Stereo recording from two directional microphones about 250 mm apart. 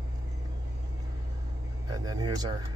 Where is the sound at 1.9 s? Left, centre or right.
Centre.